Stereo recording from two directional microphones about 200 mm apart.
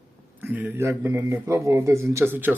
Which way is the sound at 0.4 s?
10° right (ahead or behind).